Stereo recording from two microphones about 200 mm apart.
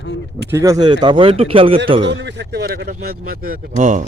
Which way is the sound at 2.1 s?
60° right (ahead or behind).